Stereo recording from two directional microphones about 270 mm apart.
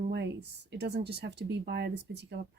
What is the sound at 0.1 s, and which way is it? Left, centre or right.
Speech, right.